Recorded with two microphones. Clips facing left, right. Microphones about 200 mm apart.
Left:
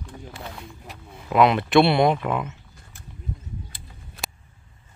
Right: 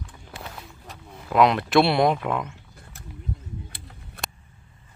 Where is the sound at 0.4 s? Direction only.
Centre (ahead or behind).